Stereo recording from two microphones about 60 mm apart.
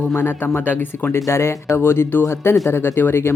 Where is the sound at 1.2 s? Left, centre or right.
Left.